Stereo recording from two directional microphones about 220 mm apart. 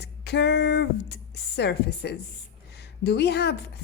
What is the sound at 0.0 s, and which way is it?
A woman's voice, 50° left (ahead or behind).